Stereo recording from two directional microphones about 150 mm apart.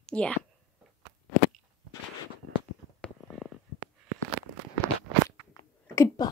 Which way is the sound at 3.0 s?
Centre (ahead or behind).